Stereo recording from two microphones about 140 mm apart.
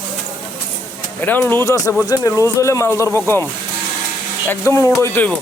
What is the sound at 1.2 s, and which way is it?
Speech, 15° left (ahead or behind).